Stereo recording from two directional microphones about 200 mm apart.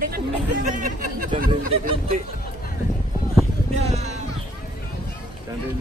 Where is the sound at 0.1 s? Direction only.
40° right (ahead or behind).